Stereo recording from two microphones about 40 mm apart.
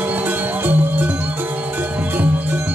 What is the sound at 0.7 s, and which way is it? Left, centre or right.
Music, right.